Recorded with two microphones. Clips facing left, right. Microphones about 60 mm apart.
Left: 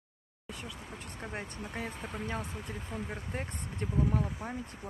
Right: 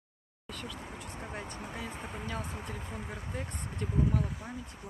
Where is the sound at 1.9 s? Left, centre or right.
Centre.